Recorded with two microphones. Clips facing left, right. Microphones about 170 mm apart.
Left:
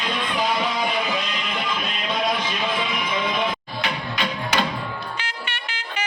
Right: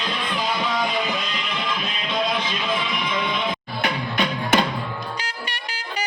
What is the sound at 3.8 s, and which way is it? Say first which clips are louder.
Music: right 3 dB; 50° right (ahead or behind).